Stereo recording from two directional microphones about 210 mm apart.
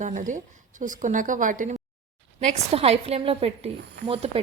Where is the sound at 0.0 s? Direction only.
35° right (ahead or behind).